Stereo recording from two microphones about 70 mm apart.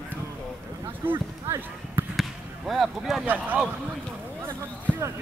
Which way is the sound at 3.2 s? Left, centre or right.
Right.